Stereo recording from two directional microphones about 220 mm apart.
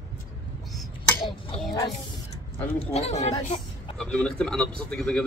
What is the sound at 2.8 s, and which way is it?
Speech, 30° left (ahead or behind).